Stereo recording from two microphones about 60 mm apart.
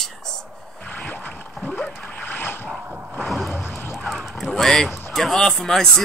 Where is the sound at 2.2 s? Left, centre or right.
Left.